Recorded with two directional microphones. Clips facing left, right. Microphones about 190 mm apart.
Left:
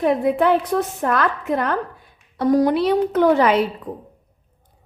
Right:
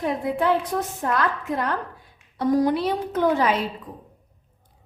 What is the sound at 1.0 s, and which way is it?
A woman's voice, 65° left (ahead or behind).